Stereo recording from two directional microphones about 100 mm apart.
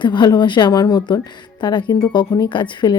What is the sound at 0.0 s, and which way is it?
A woman's voice, 50° left (ahead or behind).